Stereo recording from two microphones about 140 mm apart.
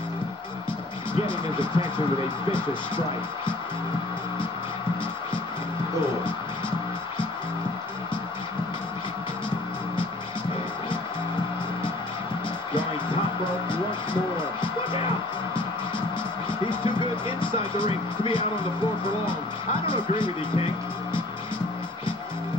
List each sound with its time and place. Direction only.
1.2 s speech: 35° left (ahead or behind)
16.4 s music: 35° left (ahead or behind)
17.4 s speech: 35° left (ahead or behind)
19.9 s speech: 35° left (ahead or behind)